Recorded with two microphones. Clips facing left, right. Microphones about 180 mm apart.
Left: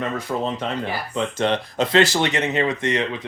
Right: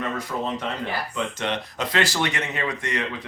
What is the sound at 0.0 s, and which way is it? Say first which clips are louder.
Speech: left 3 dB; 25° left (ahead or behind).